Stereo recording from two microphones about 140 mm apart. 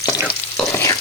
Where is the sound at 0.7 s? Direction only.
20° left (ahead or behind).